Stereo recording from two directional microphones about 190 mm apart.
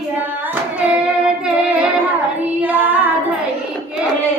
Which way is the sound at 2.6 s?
10° right (ahead or behind).